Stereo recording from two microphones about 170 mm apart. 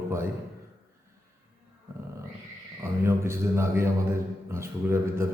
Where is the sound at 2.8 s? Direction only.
15° right (ahead or behind).